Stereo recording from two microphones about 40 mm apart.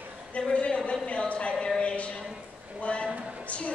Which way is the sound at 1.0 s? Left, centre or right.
Left.